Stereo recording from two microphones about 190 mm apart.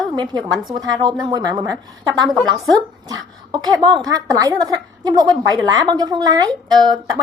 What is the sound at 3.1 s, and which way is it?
Speech, 20° right (ahead or behind).